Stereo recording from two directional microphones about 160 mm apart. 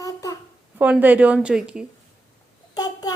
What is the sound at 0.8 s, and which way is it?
A woman's voice, 10° right (ahead or behind).